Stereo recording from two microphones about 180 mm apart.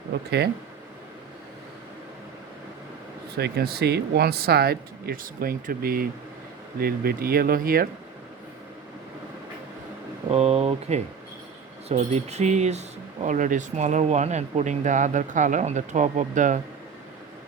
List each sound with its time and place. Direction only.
0.1 s speech: 65° right (ahead or behind)
3.3 s speech: 65° right (ahead or behind)
10.2 s speech: 35° right (ahead or behind)